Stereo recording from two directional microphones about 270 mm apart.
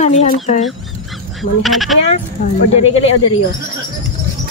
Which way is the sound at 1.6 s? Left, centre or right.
Centre.